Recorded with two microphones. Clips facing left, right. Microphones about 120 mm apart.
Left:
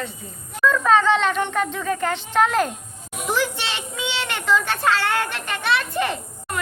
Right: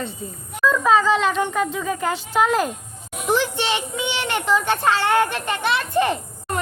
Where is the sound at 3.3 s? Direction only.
20° right (ahead or behind).